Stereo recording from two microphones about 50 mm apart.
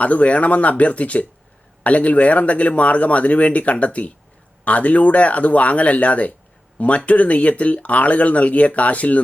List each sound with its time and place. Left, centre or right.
0.0 s speech: left